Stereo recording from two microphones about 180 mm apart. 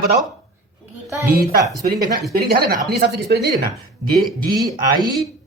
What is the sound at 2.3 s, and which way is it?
Speech, 55° right (ahead or behind).